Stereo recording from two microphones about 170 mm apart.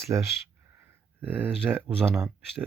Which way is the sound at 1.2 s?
10° right (ahead or behind).